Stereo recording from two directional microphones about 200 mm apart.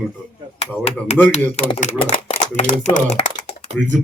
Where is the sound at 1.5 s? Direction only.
35° left (ahead or behind).